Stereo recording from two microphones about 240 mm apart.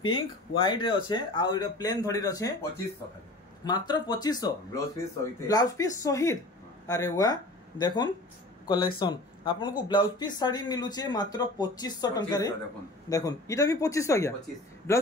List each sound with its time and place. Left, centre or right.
0.0 s speech: left
3.6 s speech: centre